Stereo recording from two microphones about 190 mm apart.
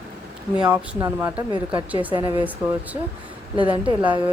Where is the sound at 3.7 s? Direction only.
30° right (ahead or behind).